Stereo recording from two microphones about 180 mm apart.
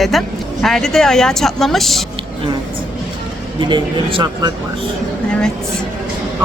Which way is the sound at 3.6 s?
25° right (ahead or behind).